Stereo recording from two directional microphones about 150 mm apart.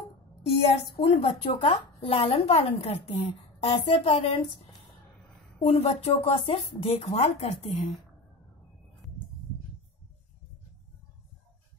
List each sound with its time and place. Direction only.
0.9 s a woman's voice: 40° left (ahead or behind)
5.6 s speech: 45° left (ahead or behind)